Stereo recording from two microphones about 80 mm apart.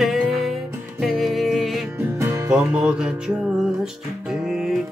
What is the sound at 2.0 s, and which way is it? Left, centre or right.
Music, right.